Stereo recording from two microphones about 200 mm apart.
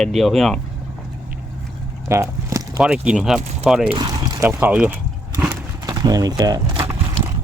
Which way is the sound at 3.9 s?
20° right (ahead or behind).